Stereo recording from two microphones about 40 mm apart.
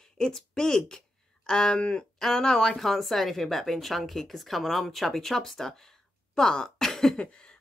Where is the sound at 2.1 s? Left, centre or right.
Centre.